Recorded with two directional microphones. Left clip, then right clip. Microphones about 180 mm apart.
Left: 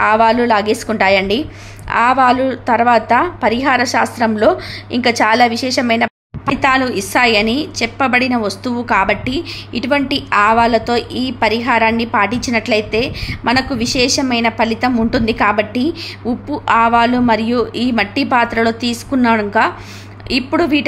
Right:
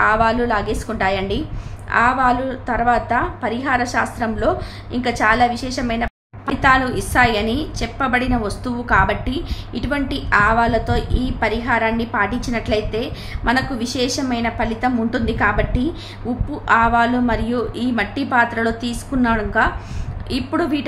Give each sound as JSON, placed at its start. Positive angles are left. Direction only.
{"t": 0.0, "sound": "a woman's voice", "side_deg": 30}
{"t": 6.4, "sound": "a woman's voice", "side_deg": 20}